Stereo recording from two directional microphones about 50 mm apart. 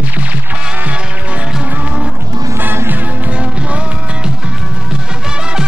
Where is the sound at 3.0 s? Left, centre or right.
Right.